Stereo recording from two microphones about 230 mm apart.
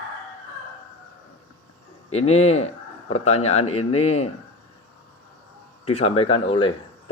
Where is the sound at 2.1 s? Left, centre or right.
Left.